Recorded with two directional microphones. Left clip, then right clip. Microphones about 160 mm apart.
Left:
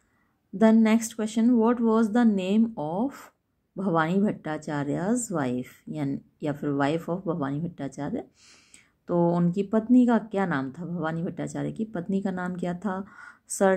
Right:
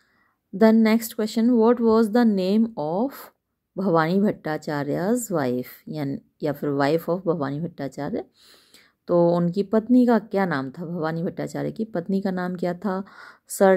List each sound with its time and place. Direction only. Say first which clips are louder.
0.6 s speech: right 3 dB; 35° right (ahead or behind)